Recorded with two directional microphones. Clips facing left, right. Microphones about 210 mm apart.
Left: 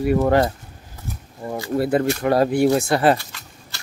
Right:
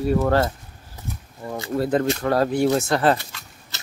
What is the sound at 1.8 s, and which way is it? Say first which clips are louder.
Speech: left 1 dB; 10° left (ahead or behind).